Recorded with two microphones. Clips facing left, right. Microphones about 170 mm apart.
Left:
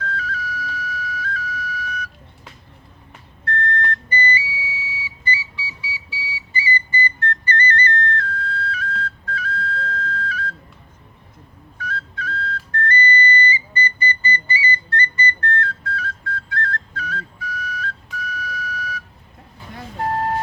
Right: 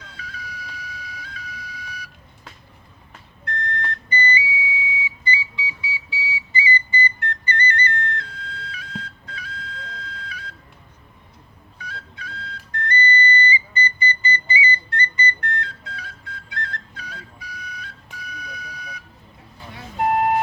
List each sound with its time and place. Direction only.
0.0 s flute: 15° right (ahead or behind)
3.4 s a sound: 15° right (ahead or behind)
5.0 s music: 15° right (ahead or behind)
6.6 s whistle: 15° right (ahead or behind)
11.8 s whistle: 15° right (ahead or behind)